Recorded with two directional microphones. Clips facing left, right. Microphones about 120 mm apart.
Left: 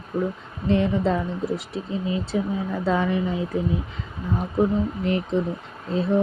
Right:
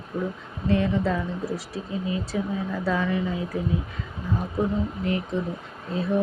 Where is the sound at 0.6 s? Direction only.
25° left (ahead or behind).